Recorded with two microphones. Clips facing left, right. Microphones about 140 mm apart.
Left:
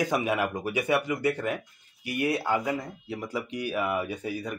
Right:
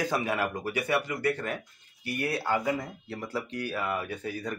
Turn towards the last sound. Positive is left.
turn(degrees=15)  # may be behind; listen again after turning